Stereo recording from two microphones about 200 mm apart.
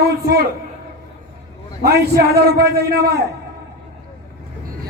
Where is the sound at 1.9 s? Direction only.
50° right (ahead or behind).